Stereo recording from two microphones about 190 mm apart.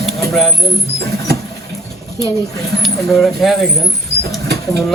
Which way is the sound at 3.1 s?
Centre (ahead or behind).